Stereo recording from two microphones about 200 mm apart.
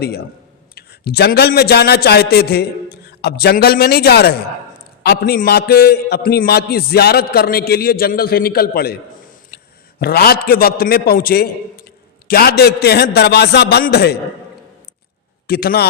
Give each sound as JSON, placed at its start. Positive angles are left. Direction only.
{"t": 0.0, "sound": "a man's voice", "side_deg": 55}
{"t": 9.5, "sound": "a sound", "side_deg": 50}
{"t": 10.0, "sound": "a man's voice", "side_deg": 50}
{"t": 15.4, "sound": "a man's voice", "side_deg": 50}